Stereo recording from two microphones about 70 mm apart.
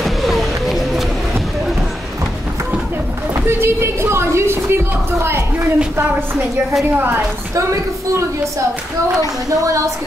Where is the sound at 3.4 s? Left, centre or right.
Right.